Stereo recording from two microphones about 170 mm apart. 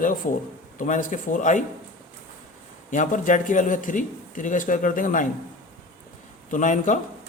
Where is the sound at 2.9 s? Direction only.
50° left (ahead or behind).